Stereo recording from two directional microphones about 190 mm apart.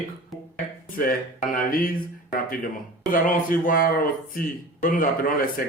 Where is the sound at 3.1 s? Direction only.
45° left (ahead or behind).